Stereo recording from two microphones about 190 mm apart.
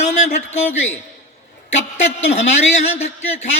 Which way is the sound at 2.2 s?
35° left (ahead or behind).